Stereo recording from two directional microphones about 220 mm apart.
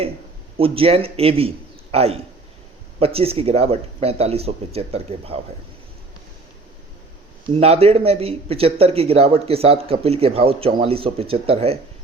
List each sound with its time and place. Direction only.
0.5 s a man's voice: 25° right (ahead or behind)
7.4 s speech: 25° right (ahead or behind)